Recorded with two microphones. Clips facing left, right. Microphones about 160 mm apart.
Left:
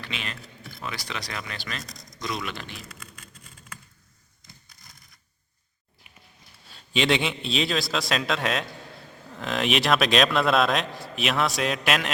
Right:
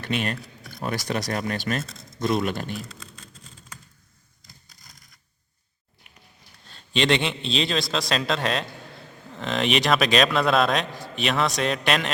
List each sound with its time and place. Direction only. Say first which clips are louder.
0.0 s speech: right 9 dB; 45° right (ahead or behind)
1.8 s a sound: right 5 dB; 25° right (ahead or behind)
2.2 s speech: right 8 dB; 50° right (ahead or behind)
3.0 s vehicle: right 2 dB; 30° right (ahead or behind)
6.7 s a man's voice: right 1 dB; centre (ahead or behind)